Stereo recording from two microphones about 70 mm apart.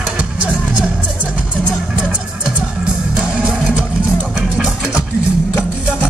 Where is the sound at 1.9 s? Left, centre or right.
Centre.